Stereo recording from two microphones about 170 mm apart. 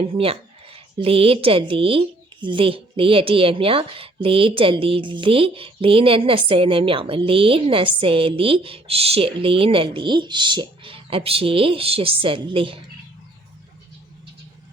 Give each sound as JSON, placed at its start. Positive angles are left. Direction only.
{"t": 0.0, "sound": "speech", "side_deg": -35}